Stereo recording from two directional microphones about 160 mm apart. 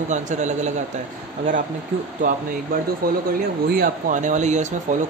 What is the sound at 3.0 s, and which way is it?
Speech, 65° right (ahead or behind).